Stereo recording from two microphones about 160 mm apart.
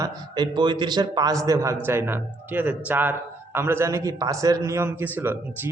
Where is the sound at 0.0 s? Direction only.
30° right (ahead or behind).